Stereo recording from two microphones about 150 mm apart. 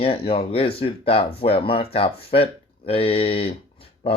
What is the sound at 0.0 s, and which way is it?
Speech, 40° left (ahead or behind).